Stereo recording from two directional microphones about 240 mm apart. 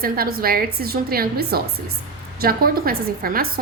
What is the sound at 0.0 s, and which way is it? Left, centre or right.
A woman's voice, right.